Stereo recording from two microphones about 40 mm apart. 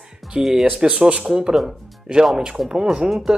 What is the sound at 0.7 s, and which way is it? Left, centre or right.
Speech, right.